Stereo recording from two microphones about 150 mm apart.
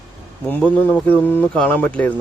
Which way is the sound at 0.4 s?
10° left (ahead or behind).